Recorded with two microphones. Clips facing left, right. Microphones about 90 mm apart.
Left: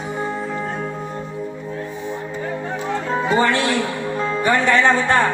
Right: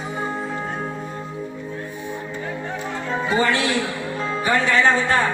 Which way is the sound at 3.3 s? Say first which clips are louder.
Left 2 dB; 40° left (ahead or behind).